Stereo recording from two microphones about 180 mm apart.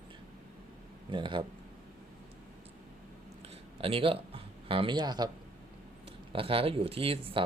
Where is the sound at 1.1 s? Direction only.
25° right (ahead or behind).